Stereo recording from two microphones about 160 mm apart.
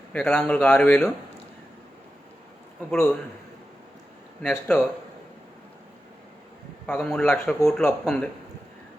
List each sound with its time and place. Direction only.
0.1 s speech: 5° left (ahead or behind)
4.4 s a man's voice: centre (ahead or behind)
6.8 s a man's voice: 5° left (ahead or behind)